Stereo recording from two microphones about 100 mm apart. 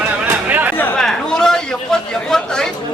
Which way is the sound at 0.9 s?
5° left (ahead or behind).